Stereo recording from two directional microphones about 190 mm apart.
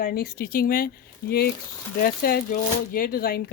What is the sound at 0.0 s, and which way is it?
Speech, 55° left (ahead or behind).